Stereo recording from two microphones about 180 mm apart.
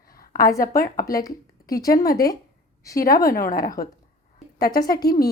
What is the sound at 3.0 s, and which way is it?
A woman's voice, 55° left (ahead or behind).